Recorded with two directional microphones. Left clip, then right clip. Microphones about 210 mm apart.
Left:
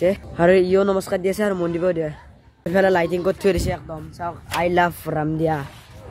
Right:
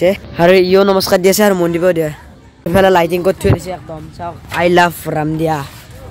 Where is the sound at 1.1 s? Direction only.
15° right (ahead or behind).